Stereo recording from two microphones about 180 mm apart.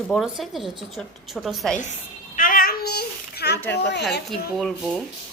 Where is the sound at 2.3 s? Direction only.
50° left (ahead or behind).